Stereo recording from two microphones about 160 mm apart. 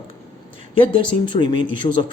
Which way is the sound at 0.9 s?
30° left (ahead or behind).